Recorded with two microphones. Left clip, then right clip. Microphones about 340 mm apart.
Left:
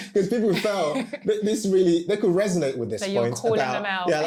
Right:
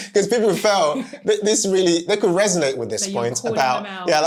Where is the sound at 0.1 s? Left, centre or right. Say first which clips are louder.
Right 5 dB; right.